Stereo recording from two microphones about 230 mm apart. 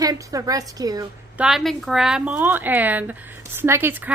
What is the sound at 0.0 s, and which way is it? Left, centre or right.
A woman's voice, centre.